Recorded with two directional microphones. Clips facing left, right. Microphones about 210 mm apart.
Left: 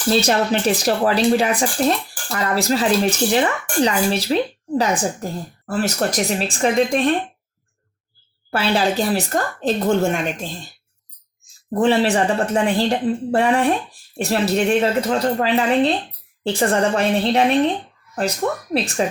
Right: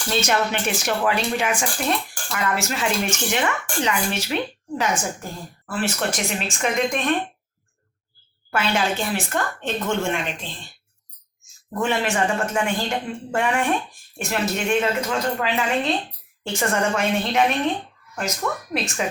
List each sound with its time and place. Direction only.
0.1 s speech: 35° left (ahead or behind)
8.4 s speech: 35° left (ahead or behind)
11.7 s speech: 35° left (ahead or behind)